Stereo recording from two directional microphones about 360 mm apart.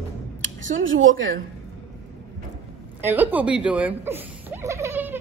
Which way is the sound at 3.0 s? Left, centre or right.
Centre.